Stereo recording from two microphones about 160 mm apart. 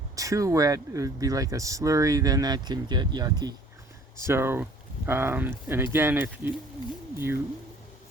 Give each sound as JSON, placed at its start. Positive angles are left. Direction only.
{"t": 0.2, "sound": "speech", "side_deg": -20}